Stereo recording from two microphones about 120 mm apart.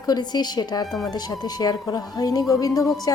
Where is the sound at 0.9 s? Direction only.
5° left (ahead or behind).